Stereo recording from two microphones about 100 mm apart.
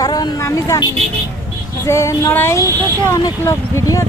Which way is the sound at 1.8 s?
30° left (ahead or behind).